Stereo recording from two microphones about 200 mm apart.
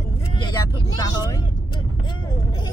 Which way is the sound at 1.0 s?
15° left (ahead or behind).